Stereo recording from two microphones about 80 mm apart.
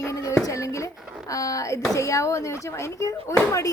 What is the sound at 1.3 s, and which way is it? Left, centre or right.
Speech, left.